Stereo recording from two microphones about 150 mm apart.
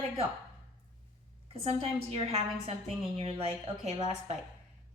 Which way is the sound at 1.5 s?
40° right (ahead or behind).